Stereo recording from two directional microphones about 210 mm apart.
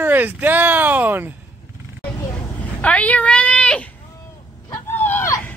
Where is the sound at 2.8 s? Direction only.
5° left (ahead or behind).